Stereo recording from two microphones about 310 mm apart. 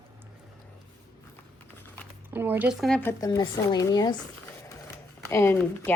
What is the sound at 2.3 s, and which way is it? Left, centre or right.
Speech, centre.